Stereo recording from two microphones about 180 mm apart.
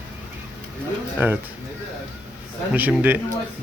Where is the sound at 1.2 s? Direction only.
10° right (ahead or behind).